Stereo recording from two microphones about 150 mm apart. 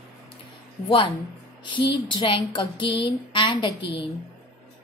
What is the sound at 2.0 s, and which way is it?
Speech, 35° left (ahead or behind).